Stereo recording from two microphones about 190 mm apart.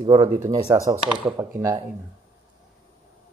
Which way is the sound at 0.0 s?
30° right (ahead or behind).